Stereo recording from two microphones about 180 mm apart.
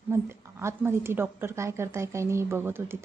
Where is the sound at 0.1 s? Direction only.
15° right (ahead or behind).